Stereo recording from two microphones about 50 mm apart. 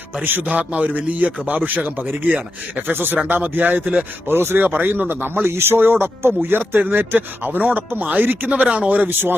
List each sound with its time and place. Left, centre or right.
0.2 s a man's voice: right
2.9 s a man's voice: right
4.3 s a man's voice: right